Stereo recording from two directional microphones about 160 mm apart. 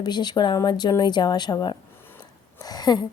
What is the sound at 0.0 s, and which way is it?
A woman's voice, 25° left (ahead or behind).